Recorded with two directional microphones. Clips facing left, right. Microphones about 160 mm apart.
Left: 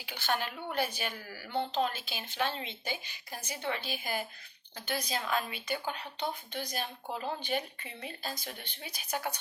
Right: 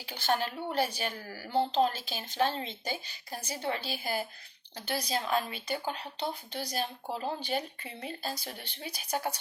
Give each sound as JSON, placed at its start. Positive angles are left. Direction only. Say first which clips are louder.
{"t": 0.0, "sound": "a woman's voice", "louder": "right 3 dB", "side_deg": -40}